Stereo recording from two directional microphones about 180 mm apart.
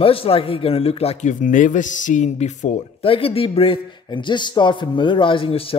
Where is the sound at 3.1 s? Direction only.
30° left (ahead or behind).